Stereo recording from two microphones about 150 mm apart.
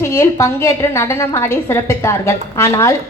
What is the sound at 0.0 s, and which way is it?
A woman's voice, 15° left (ahead or behind).